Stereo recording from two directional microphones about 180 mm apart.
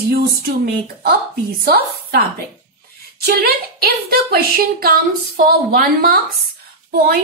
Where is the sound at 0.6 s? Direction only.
60° right (ahead or behind).